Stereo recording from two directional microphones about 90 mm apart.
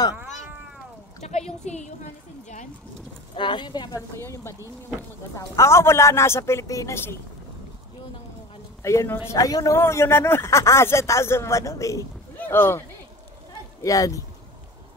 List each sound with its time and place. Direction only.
0.1 s cat: 20° right (ahead or behind)
3.3 s a woman's voice: 60° left (ahead or behind)
4.2 s speech: 30° left (ahead or behind)
8.8 s speech: 35° left (ahead or behind)
9.8 s speech: 30° left (ahead or behind)
12.4 s speech: 25° left (ahead or behind)
13.8 s speech: 40° left (ahead or behind)